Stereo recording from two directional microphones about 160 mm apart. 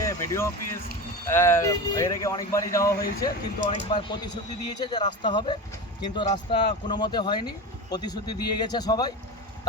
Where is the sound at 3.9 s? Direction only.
30° left (ahead or behind).